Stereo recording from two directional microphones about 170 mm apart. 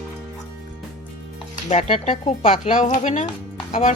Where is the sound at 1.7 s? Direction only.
40° left (ahead or behind).